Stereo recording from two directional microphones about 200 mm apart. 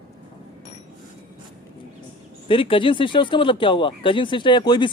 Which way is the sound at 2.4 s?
25° left (ahead or behind).